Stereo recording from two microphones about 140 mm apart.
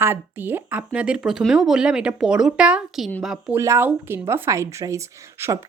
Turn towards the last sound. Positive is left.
turn(degrees=-20)  # may be behind; listen again after turning